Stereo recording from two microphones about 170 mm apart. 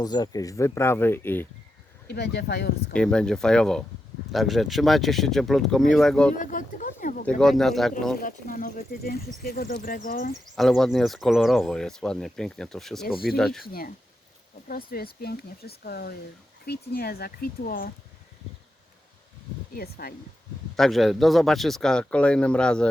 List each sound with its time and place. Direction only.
0.0 s speech: 25° left (ahead or behind)
2.0 s speech: 75° left (ahead or behind)
2.9 s speech: 5° left (ahead or behind)
6.3 s a sound: 50° left (ahead or behind)
7.3 s speech: 5° left (ahead or behind)
8.2 s speech: 55° left (ahead or behind)
10.5 s speech: centre (ahead or behind)
14.7 s speech: 60° left (ahead or behind)
19.7 s speech: 60° left (ahead or behind)
20.7 s speech: centre (ahead or behind)